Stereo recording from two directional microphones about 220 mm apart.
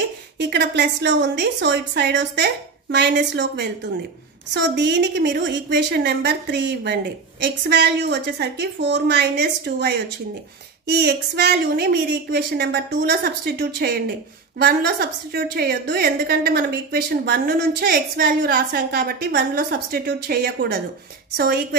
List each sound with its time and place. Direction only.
0.4 s a woman's voice: 50° right (ahead or behind)